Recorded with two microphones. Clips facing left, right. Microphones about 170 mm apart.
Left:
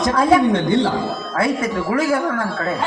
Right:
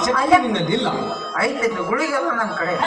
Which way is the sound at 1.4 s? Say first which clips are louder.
Even; 40° left (ahead or behind).